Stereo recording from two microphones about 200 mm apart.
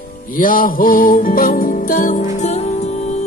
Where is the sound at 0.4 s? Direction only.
45° left (ahead or behind).